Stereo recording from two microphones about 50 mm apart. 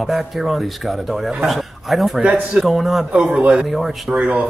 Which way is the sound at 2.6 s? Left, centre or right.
Centre.